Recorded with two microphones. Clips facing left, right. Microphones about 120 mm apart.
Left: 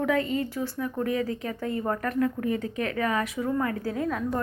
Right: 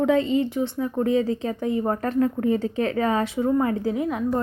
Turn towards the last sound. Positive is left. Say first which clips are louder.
# right 4 dB
turn(degrees=-15)  # may be behind; listen again after turning